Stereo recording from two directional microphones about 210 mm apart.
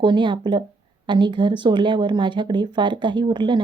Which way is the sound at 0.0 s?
20° right (ahead or behind).